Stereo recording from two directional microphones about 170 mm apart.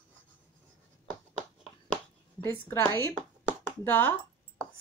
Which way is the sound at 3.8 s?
10° left (ahead or behind).